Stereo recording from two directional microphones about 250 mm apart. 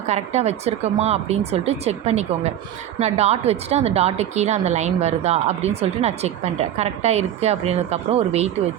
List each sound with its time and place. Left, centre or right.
0.1 s a woman's voice: right